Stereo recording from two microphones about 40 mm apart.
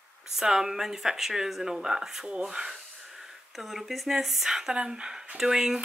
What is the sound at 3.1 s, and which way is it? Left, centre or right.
Speech, centre.